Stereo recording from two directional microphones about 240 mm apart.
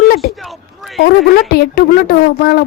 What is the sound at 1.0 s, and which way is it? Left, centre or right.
Speech, left.